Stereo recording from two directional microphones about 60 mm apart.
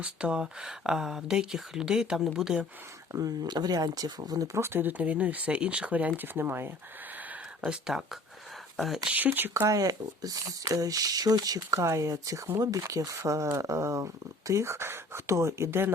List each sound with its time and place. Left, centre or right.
0.0 s speech: centre
3.1 s speech: right
4.5 s speech: right
6.2 s speech: right
7.6 s speech: centre
9.1 s speech: right
9.6 s speech: right
12.5 s speech: right